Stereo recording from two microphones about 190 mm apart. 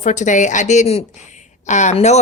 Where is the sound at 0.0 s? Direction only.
40° left (ahead or behind).